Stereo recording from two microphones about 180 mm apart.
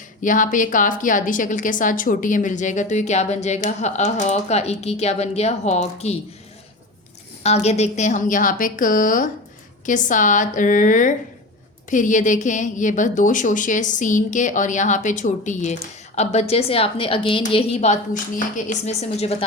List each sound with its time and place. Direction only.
0.2 s a woman's voice: 45° left (ahead or behind)
7.4 s a woman's voice: 35° left (ahead or behind)